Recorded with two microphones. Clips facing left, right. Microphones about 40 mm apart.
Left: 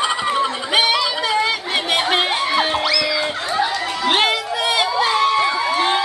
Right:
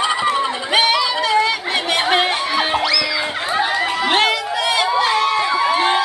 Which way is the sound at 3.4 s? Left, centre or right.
Right.